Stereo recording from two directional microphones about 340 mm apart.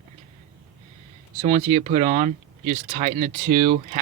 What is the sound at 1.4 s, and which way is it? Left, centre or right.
Speech, centre.